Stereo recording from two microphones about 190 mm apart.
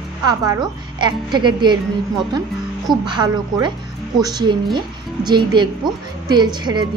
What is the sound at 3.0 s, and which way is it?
Speech, 25° right (ahead or behind).